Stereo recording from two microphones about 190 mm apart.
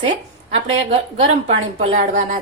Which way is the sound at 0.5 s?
35° right (ahead or behind).